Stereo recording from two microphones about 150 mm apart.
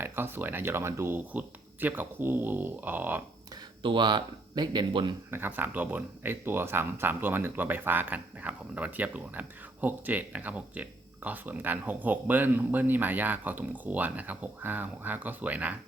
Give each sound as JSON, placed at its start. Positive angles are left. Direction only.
{"t": 0.0, "sound": "speech", "side_deg": -15}
{"t": 3.5, "sound": "speech", "side_deg": -30}
{"t": 5.3, "sound": "speech", "side_deg": -15}